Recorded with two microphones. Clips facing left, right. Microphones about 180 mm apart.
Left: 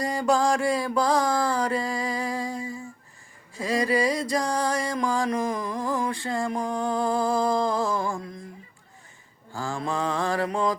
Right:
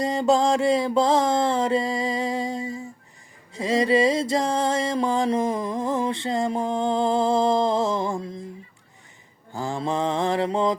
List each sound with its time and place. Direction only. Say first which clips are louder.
0.0 s mantra: right 3 dB; 20° right (ahead or behind)
3.5 s music: right 4 dB; 20° right (ahead or behind)
9.5 s mantra: right 3 dB; 20° right (ahead or behind)